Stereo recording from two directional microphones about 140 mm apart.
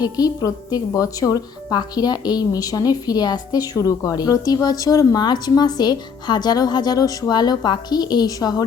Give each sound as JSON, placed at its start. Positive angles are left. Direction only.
{"t": 0.0, "sound": "a woman's voice", "side_deg": 25}